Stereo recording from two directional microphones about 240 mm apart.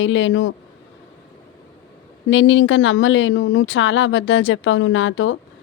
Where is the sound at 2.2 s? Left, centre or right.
Left.